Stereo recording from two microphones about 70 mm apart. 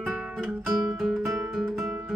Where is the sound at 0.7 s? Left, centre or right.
Centre.